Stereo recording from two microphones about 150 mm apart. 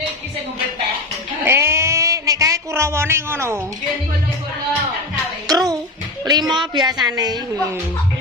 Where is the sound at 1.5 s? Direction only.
15° right (ahead or behind).